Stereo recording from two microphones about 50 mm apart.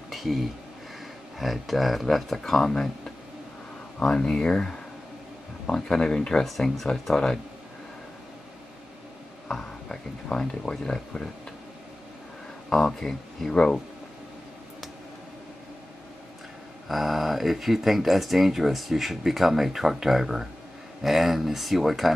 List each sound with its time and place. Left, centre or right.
0.1 s a sound: centre
1.4 s speech: centre
4.0 s speech: centre
9.5 s a sound: centre
10.6 s speech: centre
12.6 s speech: centre
16.8 s speech: centre